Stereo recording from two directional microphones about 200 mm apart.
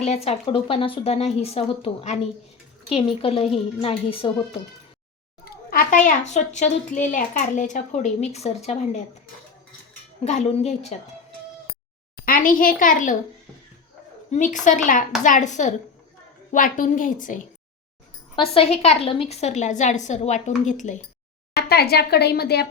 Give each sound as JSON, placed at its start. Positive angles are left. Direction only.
{"t": 0.0, "sound": "a child's voice", "side_deg": 30}
{"t": 5.5, "sound": "a child's voice", "side_deg": 45}
{"t": 10.2, "sound": "a child's voice", "side_deg": 35}
{"t": 12.2, "sound": "a child's voice", "side_deg": 45}
{"t": 14.3, "sound": "a child's voice", "side_deg": 40}
{"t": 18.3, "sound": "a child's voice", "side_deg": 30}
{"t": 21.5, "sound": "a woman's voice", "side_deg": 50}